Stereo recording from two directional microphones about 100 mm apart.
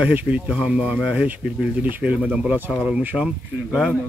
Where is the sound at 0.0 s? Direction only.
15° right (ahead or behind).